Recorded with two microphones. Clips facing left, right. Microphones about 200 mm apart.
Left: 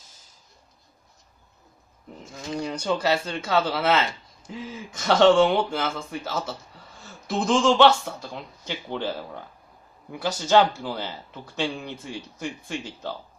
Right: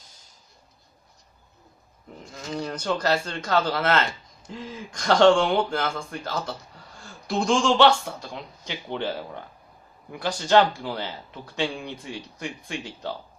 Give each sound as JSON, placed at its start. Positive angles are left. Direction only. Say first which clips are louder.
{"t": 2.2, "sound": "a man's voice", "louder": "left 1 dB", "side_deg": 5}